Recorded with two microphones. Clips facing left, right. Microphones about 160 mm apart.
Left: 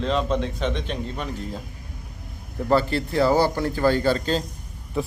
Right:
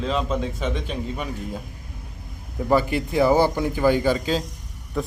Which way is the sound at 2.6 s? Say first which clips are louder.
Even; 15° right (ahead or behind).